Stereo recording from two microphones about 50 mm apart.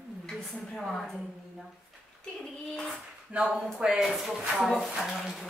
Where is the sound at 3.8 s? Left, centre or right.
Centre.